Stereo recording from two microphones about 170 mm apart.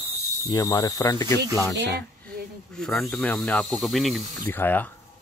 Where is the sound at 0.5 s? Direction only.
20° left (ahead or behind).